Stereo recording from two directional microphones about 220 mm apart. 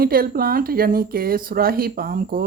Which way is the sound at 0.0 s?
40° right (ahead or behind).